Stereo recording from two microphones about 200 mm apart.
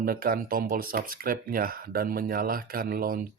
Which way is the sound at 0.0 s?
45° right (ahead or behind).